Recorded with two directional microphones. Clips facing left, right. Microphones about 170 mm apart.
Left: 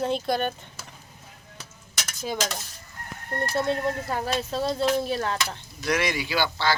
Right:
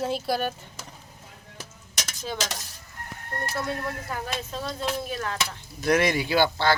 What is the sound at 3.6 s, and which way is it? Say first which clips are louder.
Speech: left 6 dB; 25° left (ahead or behind).